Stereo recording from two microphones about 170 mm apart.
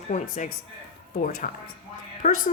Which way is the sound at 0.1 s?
55° left (ahead or behind).